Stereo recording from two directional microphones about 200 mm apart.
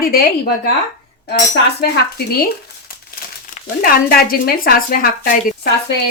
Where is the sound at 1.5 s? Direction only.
55° left (ahead or behind).